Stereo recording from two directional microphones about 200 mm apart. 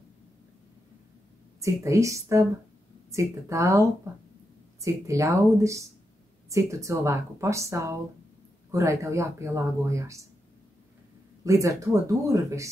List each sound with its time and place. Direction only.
1.6 s speech: 15° right (ahead or behind)
11.4 s speech: 15° right (ahead or behind)